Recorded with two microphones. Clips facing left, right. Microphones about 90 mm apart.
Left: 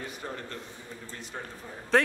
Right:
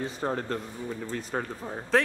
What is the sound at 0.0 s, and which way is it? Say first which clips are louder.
Speech: right 7 dB; 30° right (ahead or behind).